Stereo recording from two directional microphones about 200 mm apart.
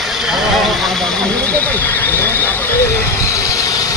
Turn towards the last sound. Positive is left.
turn(degrees=15)  # may be behind; listen again after turning